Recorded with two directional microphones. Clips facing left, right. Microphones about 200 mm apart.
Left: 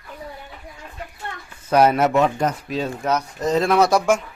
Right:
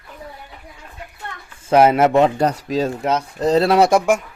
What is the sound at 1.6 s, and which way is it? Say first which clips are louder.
Speech: right 3 dB; 25° right (ahead or behind).